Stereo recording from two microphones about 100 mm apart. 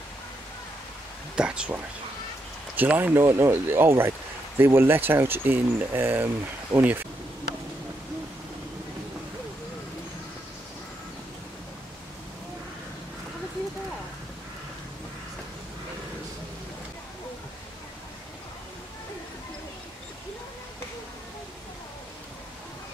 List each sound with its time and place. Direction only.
1.3 s speech: 10° right (ahead or behind)